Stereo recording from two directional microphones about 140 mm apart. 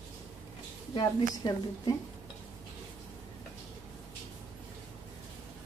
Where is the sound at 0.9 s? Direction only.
30° left (ahead or behind).